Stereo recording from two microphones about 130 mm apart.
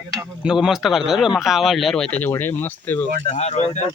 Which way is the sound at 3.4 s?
55° left (ahead or behind).